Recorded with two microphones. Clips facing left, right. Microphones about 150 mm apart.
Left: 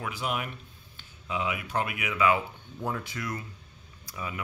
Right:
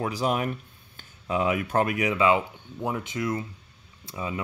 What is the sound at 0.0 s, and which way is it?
Speech, 35° right (ahead or behind).